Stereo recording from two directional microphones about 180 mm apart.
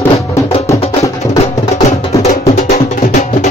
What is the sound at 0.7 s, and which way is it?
Music, 15° left (ahead or behind).